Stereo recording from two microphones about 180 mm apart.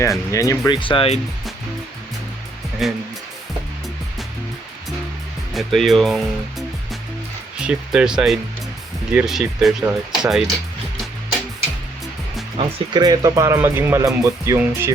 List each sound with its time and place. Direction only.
0.3 s speech: 15° left (ahead or behind)
2.8 s speech: centre (ahead or behind)
5.5 s speech: centre (ahead or behind)
12.5 s speech: 25° right (ahead or behind)